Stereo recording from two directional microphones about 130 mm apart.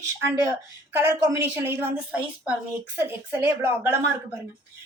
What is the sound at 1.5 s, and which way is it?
A woman's voice, 15° right (ahead or behind).